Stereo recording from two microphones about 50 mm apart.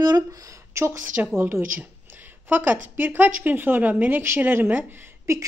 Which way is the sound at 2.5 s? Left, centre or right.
Right.